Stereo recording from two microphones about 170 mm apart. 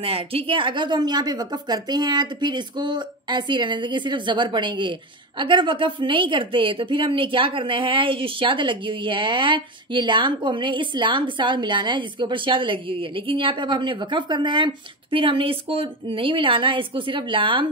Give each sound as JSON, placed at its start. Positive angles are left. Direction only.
{"t": 0.0, "sound": "a woman's voice", "side_deg": -35}